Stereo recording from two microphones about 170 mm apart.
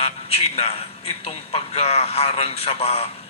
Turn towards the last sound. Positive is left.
turn(degrees=40)  # may be behind; listen again after turning